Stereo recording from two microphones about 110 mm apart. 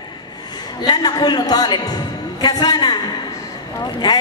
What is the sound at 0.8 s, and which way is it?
A woman's voice, 40° left (ahead or behind).